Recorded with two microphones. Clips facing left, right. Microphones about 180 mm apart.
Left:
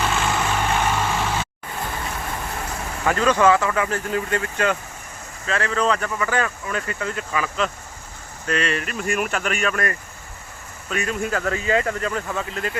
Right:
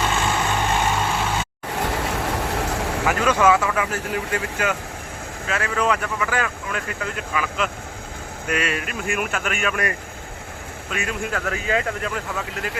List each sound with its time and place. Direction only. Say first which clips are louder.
0.0 s vehicle: even; centre (ahead or behind)
1.7 s vehicle: right 5 dB; 75° right (ahead or behind)
3.1 s speech: left 1 dB; 10° right (ahead or behind)
10.9 s speech: left 3 dB; centre (ahead or behind)